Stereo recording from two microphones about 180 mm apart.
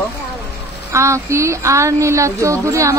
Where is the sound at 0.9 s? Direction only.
15° right (ahead or behind).